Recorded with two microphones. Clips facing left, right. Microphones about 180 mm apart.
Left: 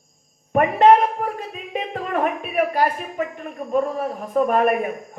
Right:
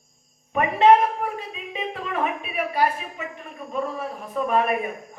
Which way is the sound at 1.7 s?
50° left (ahead or behind).